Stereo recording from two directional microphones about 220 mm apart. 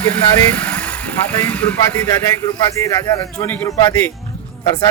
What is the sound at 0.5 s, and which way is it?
A man's voice, 5° left (ahead or behind).